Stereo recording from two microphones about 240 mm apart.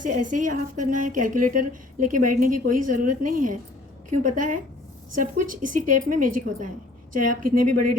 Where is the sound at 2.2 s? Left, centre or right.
Right.